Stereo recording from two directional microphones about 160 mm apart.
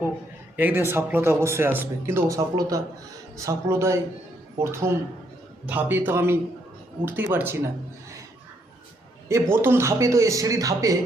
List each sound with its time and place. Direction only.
0.5 s speech: 15° right (ahead or behind)
9.3 s speech: 15° right (ahead or behind)